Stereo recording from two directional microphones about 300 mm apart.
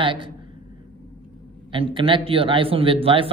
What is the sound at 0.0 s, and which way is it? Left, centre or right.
Speech, centre.